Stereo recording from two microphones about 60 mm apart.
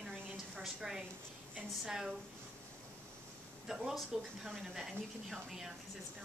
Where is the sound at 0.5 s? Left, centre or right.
Centre.